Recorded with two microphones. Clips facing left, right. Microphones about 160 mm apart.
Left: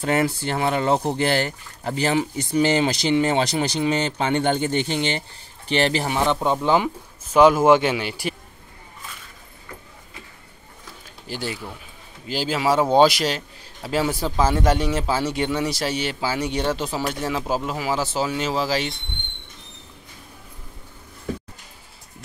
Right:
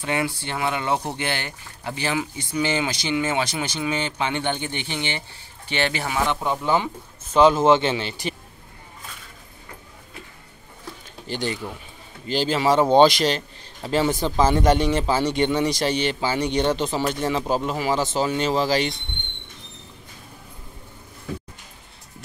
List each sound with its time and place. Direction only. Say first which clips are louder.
0.0 s speech: left 4 dB; 40° left (ahead or behind)
5.9 s speech: left 3 dB; 30° left (ahead or behind); by 8.4 s 10° left (ahead or behind)
11.2 s speech: right 3 dB; 5° left (ahead or behind)